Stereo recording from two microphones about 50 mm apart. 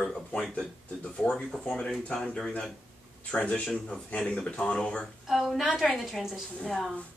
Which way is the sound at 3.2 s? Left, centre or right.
Left.